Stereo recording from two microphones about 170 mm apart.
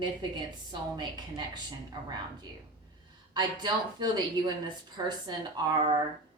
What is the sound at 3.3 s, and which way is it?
A woman's voice, 25° right (ahead or behind).